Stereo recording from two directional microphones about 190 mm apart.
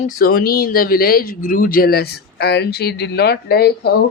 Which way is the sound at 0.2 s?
55° left (ahead or behind).